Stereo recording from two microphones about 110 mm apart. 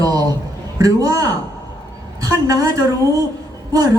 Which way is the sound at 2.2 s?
35° right (ahead or behind).